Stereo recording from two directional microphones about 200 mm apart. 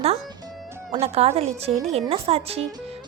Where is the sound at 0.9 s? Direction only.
30° right (ahead or behind).